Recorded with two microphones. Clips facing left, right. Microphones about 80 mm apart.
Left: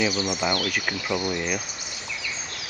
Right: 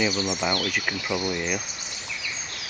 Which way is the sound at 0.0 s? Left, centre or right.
Centre.